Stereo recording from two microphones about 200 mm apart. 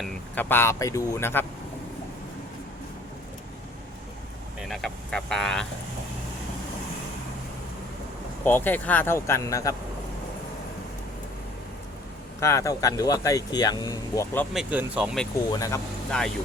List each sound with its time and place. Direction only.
0.0 s speech: 10° left (ahead or behind)
4.7 s speech: 5° left (ahead or behind)
8.4 s speech: 10° left (ahead or behind)
12.4 s speech: 15° left (ahead or behind)
14.5 s speech: 5° right (ahead or behind)
15.5 s speech: 15° left (ahead or behind)
16.1 s speech: 5° left (ahead or behind)